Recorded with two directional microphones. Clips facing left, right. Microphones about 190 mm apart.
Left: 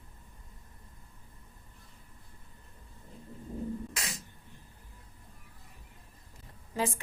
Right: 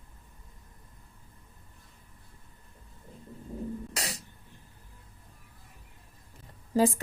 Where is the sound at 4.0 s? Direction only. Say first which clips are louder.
Right 4 dB; 35° right (ahead or behind).